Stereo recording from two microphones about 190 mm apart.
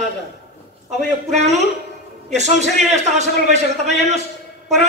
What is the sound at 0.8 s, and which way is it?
A man's voice, 35° right (ahead or behind).